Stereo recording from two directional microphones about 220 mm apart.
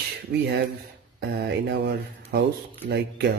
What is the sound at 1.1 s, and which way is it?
Speech, 45° right (ahead or behind).